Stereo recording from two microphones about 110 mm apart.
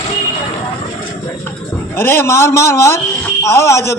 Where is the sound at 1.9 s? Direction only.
20° left (ahead or behind).